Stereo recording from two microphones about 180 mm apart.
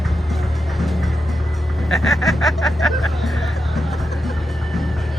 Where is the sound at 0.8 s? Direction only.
Centre (ahead or behind).